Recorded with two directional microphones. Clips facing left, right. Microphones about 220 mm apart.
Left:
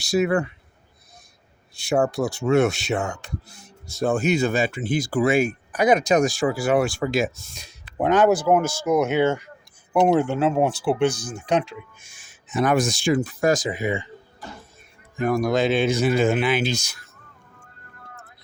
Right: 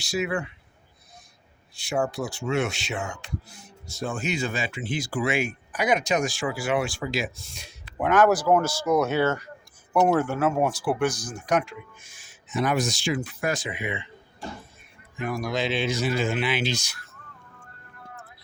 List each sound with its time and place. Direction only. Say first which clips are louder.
0.1 s speech: left 7 dB; 40° left (ahead or behind)
2.0 s speech: left 5 dB; 40° left (ahead or behind)
7.9 s speech: left 2 dB; 30° left (ahead or behind)
12.5 s speech: left 4 dB; 50° left (ahead or behind)
15.2 s speech: left 7 dB; 50° left (ahead or behind)